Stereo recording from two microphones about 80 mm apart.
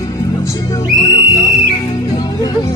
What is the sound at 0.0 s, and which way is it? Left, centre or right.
Music, left.